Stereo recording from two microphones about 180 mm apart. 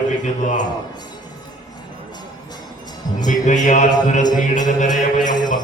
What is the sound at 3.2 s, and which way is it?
Music, 45° left (ahead or behind).